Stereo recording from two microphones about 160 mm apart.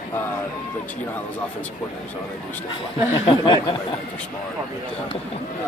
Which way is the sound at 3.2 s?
30° left (ahead or behind).